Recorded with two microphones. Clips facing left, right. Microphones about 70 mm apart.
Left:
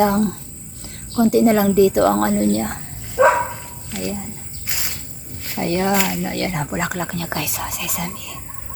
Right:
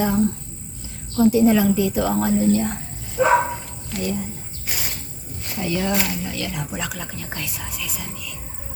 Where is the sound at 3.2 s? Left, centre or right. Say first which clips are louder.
Left 5 dB; left.